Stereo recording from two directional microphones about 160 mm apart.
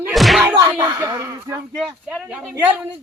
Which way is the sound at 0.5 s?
15° right (ahead or behind).